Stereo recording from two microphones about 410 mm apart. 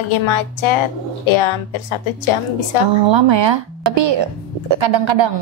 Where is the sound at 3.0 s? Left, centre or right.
Right.